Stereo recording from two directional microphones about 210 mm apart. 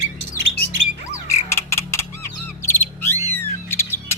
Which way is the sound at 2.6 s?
10° left (ahead or behind).